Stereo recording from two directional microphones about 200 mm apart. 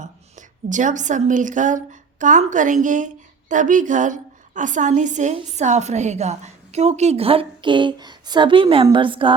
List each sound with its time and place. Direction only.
0.0 s a woman's voice: 40° right (ahead or behind)